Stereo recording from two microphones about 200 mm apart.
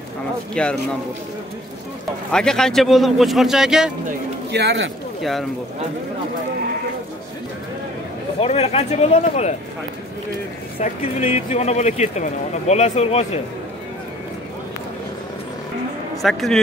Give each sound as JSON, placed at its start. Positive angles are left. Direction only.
{"t": 0.6, "sound": "a man's voice", "side_deg": 5}
{"t": 2.3, "sound": "a man's voice", "side_deg": 5}
{"t": 4.5, "sound": "speech", "side_deg": -60}
{"t": 8.4, "sound": "speech", "side_deg": 30}
{"t": 10.8, "sound": "speech", "side_deg": 35}
{"t": 16.2, "sound": "a man's voice", "side_deg": 0}